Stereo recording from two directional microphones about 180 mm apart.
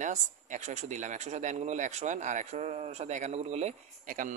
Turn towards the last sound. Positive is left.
turn(degrees=-50)  # may be behind; listen again after turning